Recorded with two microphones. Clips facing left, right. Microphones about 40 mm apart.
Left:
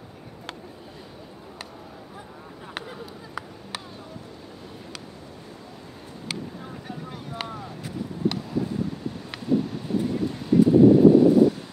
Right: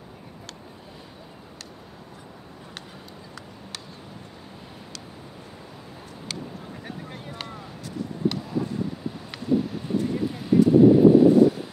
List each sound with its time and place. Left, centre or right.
7.3 s boat: centre
9.3 s a sound: centre
10.8 s wind noise: centre